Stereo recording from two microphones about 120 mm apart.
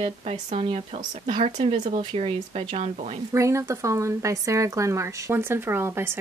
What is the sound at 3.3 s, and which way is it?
Speech, 25° right (ahead or behind).